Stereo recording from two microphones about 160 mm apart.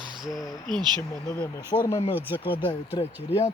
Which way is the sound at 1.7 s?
30° left (ahead or behind).